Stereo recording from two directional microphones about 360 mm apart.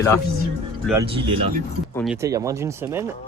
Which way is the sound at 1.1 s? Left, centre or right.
Centre.